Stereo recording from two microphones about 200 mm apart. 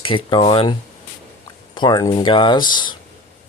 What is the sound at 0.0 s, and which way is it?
Speech, 25° left (ahead or behind).